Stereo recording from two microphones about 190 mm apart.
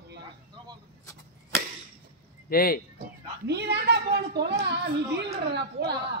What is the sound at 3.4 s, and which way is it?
A woman's voice, 60° right (ahead or behind).